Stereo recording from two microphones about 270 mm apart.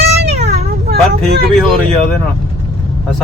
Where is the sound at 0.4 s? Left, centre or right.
Right.